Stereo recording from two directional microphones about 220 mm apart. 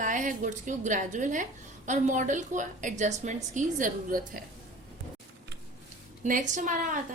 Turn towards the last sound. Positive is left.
turn(degrees=-35)  # may be behind; listen again after turning